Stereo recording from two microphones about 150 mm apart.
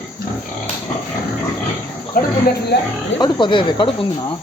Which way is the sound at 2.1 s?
70° left (ahead or behind).